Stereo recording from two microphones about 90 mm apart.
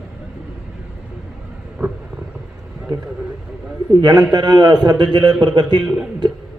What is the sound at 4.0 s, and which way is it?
A man's voice, 50° right (ahead or behind).